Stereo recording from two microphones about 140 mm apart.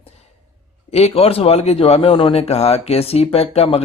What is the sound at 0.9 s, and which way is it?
Speech, 45° left (ahead or behind).